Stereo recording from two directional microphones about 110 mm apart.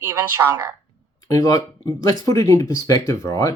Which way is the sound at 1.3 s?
30° left (ahead or behind).